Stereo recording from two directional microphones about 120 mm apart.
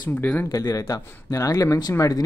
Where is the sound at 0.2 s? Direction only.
15° left (ahead or behind).